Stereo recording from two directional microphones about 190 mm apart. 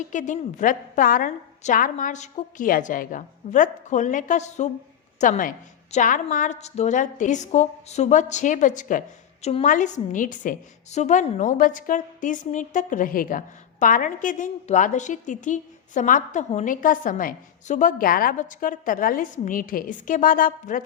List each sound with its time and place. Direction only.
0.0 s a woman's voice: 40° left (ahead or behind)